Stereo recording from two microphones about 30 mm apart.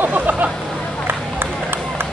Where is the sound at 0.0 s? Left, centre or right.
Right.